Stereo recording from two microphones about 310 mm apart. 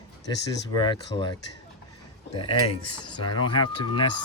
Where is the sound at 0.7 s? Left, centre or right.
Centre.